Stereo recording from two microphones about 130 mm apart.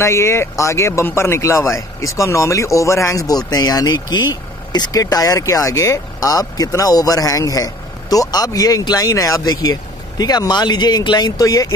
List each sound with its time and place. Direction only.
0.0 s speech: 20° left (ahead or behind)